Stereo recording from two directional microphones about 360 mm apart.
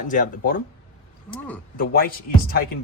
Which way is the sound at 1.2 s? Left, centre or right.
Centre.